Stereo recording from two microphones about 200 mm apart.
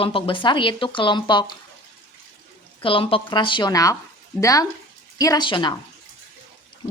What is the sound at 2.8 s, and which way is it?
A woman's voice, 25° left (ahead or behind).